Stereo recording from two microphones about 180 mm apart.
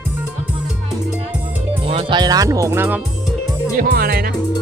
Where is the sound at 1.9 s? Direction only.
30° right (ahead or behind); by 3.0 s 15° right (ahead or behind).